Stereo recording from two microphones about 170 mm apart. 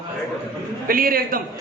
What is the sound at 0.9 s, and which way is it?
Speech, 55° right (ahead or behind).